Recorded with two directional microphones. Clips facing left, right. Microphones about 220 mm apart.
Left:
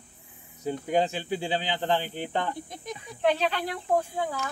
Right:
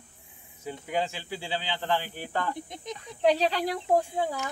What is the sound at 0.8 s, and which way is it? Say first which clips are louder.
Speech: left 5 dB; 20° left (ahead or behind).